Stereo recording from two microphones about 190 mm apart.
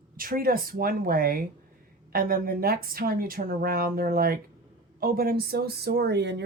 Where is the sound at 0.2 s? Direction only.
50° right (ahead or behind).